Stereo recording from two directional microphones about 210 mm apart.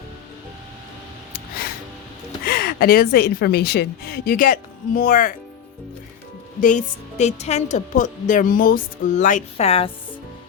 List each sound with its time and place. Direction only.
2.5 s a woman's voice: 45° left (ahead or behind)
6.6 s a woman's voice: 35° left (ahead or behind)